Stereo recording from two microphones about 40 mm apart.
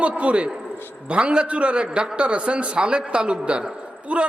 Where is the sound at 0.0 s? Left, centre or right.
Right.